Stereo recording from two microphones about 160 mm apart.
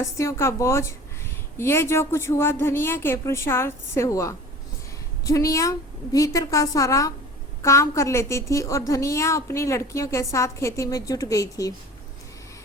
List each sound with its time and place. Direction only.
0.0 s a woman's voice: 20° left (ahead or behind)